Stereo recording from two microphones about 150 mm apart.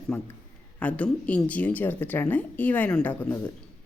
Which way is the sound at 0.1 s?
10° left (ahead or behind).